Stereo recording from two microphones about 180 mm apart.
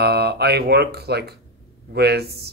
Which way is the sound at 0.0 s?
65° right (ahead or behind).